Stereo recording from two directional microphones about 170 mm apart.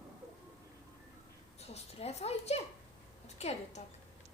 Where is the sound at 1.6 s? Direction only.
40° left (ahead or behind).